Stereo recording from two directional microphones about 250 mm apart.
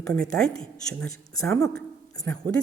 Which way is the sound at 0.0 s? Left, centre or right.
Centre.